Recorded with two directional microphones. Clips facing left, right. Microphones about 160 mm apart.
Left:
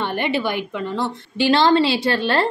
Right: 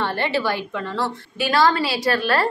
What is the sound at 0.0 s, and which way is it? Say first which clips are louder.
A woman's voice: left 1 dB; 15° left (ahead or behind).